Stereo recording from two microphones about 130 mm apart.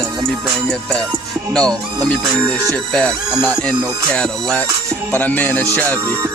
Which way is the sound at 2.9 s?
10° left (ahead or behind).